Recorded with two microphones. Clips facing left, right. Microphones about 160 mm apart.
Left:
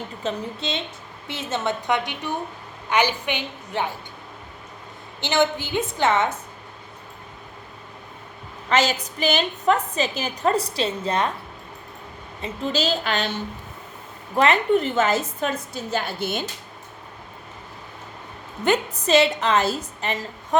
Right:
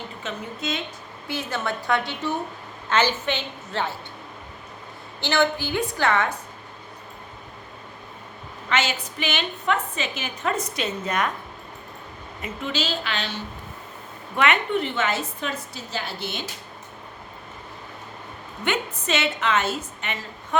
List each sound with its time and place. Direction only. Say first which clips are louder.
0.2 s a woman's voice: left 5 dB; 30° left (ahead or behind); by 3.9 s 15° left (ahead or behind)
5.2 s a woman's voice: left 1 dB; 20° left (ahead or behind)
8.7 s a woman's voice: left 4 dB; 40° left (ahead or behind)
12.4 s a woman's voice: left 4 dB; 40° left (ahead or behind)
14.3 s a woman's voice: left 4 dB; 35° left (ahead or behind)
18.6 s a woman's voice: left 5 dB; 35° left (ahead or behind)